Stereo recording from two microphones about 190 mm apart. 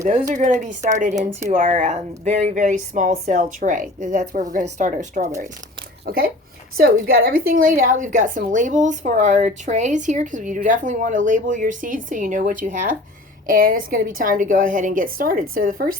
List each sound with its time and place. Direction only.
0.0 s speech: 40° right (ahead or behind)
6.1 s a woman's voice: 50° right (ahead or behind)